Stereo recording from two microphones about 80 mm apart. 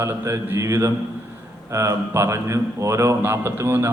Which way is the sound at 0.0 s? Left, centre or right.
Right.